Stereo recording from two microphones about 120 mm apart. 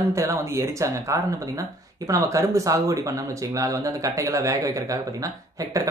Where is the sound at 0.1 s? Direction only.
25° right (ahead or behind).